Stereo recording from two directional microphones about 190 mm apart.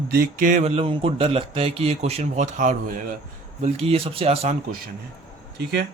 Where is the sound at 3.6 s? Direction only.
30° right (ahead or behind).